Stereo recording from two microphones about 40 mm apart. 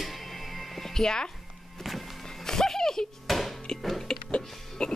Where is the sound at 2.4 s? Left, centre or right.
Centre.